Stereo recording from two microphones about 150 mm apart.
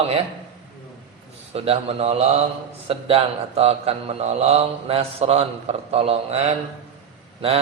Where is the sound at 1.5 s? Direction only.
40° right (ahead or behind).